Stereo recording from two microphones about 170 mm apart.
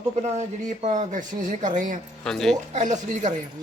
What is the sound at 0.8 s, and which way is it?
Speech, 45° right (ahead or behind).